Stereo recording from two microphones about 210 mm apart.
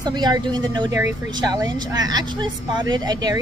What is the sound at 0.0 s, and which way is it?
Speech, 20° right (ahead or behind).